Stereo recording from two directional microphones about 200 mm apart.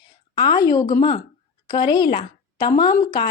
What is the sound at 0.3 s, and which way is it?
A woman's voice, 20° left (ahead or behind).